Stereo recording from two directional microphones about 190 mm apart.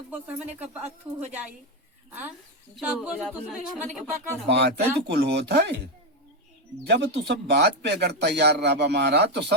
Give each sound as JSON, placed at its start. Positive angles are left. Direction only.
{"t": 0.1, "sound": "speech", "side_deg": -10}
{"t": 2.7, "sound": "speech", "side_deg": -5}
{"t": 4.4, "sound": "speech", "side_deg": -60}